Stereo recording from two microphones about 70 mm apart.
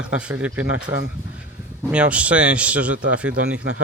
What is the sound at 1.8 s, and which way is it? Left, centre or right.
Speech, centre.